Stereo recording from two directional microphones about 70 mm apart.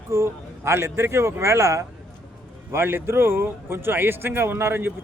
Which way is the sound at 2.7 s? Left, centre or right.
Right.